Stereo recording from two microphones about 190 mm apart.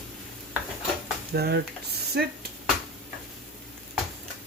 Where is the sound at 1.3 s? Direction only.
55° right (ahead or behind).